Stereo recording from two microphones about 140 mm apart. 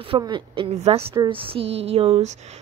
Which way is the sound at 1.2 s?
40° right (ahead or behind).